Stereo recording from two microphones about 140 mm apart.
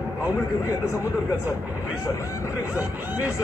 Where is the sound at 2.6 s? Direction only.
15° right (ahead or behind).